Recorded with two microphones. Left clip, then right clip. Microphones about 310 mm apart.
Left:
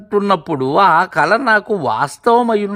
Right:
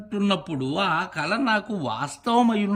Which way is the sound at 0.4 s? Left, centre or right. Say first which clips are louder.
Left 13 dB; centre.